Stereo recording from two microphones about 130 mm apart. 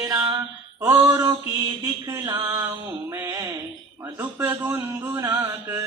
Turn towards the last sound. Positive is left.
turn(degrees=-25)  # may be behind; listen again after turning